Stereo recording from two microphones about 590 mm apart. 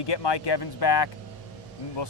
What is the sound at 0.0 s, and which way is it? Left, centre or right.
Speech, left.